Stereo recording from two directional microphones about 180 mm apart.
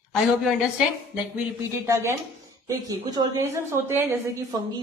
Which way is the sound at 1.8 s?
15° right (ahead or behind).